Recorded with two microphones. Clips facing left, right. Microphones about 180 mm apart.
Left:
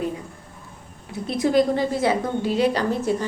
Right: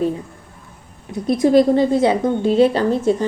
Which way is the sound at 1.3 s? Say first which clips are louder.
Right 6 dB; 25° right (ahead or behind).